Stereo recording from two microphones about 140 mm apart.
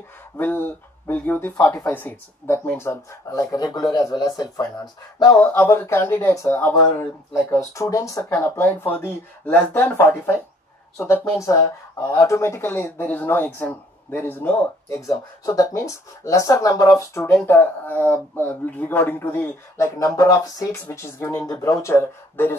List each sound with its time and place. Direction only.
0.4 s speech: 15° left (ahead or behind)
3.6 s speech: 30° left (ahead or behind)
5.4 s speech: 15° left (ahead or behind)
15.0 s speech: 25° left (ahead or behind)